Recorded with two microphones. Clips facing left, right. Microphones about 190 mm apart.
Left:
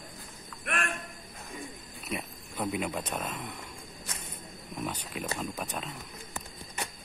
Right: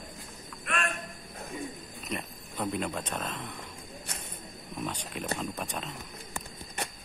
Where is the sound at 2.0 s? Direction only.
5° left (ahead or behind).